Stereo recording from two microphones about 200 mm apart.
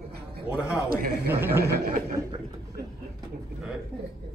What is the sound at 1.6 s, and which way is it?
Snicker, 50° right (ahead or behind).